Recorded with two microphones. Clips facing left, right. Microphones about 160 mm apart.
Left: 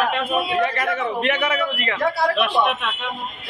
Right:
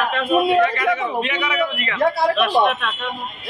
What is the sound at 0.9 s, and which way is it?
A man's voice, 50° left (ahead or behind).